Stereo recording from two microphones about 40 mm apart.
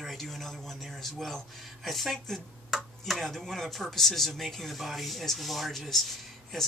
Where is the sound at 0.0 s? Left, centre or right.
Centre.